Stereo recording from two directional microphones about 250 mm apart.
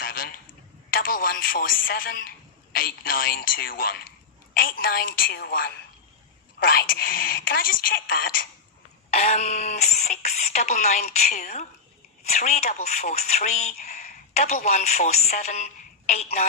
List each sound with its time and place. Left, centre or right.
0.0 s a sound: left
0.9 s a woman's voice: left
9.0 s speech: left